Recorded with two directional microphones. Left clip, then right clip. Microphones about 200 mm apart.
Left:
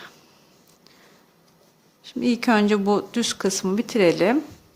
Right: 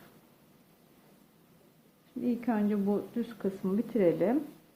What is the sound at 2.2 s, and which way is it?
Speech, 40° left (ahead or behind).